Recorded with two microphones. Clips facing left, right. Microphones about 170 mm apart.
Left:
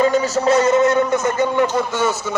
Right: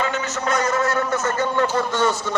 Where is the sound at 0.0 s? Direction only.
35° left (ahead or behind).